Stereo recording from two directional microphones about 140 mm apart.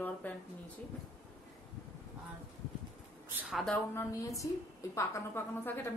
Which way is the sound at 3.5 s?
Centre (ahead or behind).